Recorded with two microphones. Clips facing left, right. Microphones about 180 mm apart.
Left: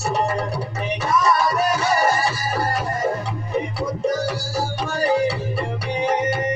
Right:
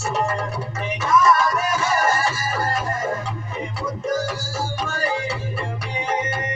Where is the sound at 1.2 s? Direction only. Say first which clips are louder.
Even; 35° left (ahead or behind).